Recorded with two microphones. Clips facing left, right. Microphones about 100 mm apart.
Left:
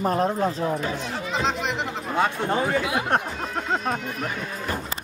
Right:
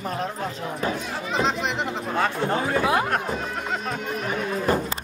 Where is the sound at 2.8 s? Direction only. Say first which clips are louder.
Right 4 dB; 40° right (ahead or behind).